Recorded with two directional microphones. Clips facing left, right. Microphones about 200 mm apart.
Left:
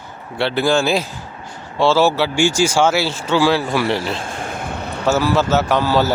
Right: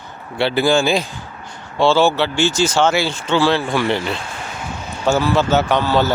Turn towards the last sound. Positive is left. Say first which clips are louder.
# even
turn(degrees=5)  # may be behind; listen again after turning